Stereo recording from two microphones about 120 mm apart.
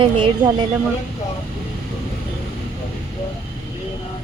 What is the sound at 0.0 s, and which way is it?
Speech, 45° right (ahead or behind).